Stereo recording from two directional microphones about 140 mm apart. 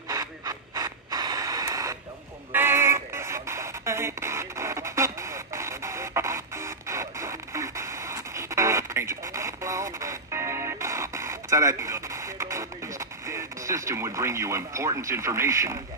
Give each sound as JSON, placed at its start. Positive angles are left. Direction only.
{"t": 0.1, "sound": "printer", "side_deg": -25}
{"t": 2.5, "sound": "radio", "side_deg": -15}